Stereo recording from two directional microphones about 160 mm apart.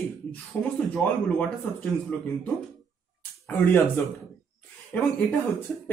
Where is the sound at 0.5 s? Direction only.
15° left (ahead or behind).